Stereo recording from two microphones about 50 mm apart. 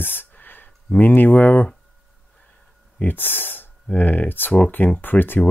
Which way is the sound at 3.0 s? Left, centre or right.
Left.